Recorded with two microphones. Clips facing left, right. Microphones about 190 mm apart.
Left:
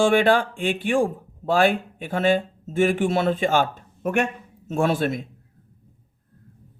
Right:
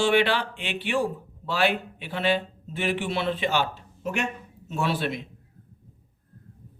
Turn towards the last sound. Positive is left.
turn(degrees=45)  # may be behind; listen again after turning